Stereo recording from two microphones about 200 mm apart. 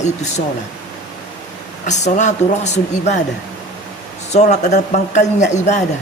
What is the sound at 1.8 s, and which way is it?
Speech, 35° left (ahead or behind).